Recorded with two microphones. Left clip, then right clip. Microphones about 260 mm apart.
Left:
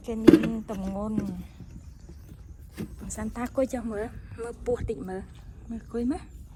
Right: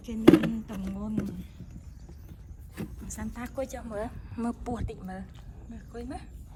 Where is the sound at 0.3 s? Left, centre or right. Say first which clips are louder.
Left 2 dB; right.